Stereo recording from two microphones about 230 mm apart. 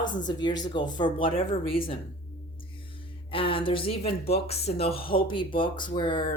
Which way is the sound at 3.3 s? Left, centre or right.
Left.